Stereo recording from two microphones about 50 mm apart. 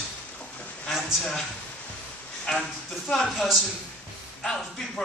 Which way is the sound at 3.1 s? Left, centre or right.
Centre.